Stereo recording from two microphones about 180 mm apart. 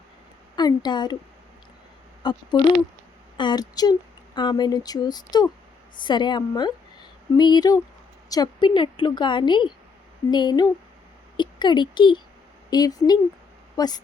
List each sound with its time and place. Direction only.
0.5 s a woman's voice: 25° left (ahead or behind)
2.2 s a woman's voice: 25° left (ahead or behind)